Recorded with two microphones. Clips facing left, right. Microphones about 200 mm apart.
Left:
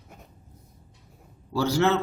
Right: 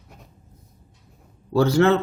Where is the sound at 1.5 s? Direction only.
55° right (ahead or behind).